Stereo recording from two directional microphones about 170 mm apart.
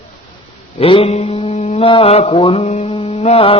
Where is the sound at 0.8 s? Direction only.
35° left (ahead or behind).